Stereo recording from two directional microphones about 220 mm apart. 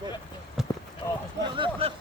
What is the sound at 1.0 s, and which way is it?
Speech, 10° left (ahead or behind).